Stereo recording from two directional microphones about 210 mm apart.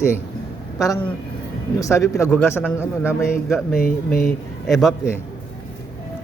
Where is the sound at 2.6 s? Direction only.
5° right (ahead or behind).